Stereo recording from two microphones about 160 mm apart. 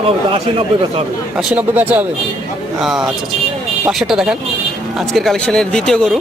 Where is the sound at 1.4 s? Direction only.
5° right (ahead or behind).